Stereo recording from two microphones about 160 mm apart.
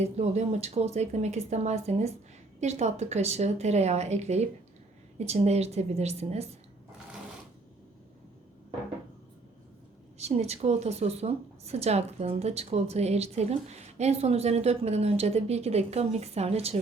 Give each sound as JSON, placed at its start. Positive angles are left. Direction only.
{"t": 0.0, "sound": "a woman's voice", "side_deg": -45}
{"t": 10.2, "sound": "a woman's voice", "side_deg": -40}